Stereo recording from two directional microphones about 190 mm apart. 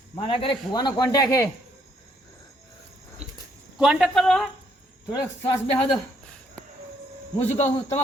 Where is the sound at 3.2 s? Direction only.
35° right (ahead or behind).